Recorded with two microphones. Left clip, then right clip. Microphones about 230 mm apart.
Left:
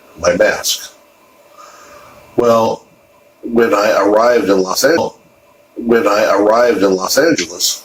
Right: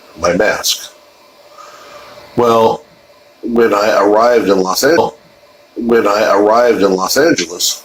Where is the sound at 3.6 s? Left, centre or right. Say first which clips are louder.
Right 1 dB; right.